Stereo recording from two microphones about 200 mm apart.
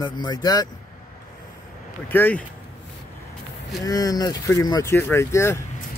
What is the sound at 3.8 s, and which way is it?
Speech, 20° left (ahead or behind).